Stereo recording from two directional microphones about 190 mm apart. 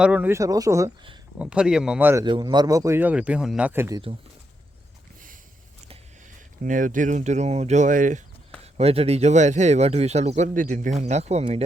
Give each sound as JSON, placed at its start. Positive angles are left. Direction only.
{"t": 0.0, "sound": "speech", "side_deg": -10}
{"t": 1.4, "sound": "speech", "side_deg": -5}
{"t": 2.2, "sound": "speech", "side_deg": -25}
{"t": 6.6, "sound": "speech", "side_deg": -45}
{"t": 8.6, "sound": "speech", "side_deg": -30}